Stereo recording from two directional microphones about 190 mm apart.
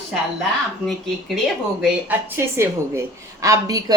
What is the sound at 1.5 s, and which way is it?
A woman's voice, 5° right (ahead or behind).